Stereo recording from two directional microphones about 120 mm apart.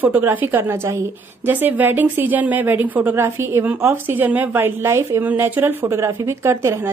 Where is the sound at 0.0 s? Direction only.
15° right (ahead or behind).